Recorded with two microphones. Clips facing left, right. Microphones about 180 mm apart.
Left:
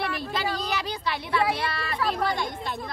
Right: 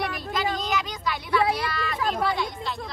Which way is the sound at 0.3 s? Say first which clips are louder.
Right 5 dB; 30° left (ahead or behind).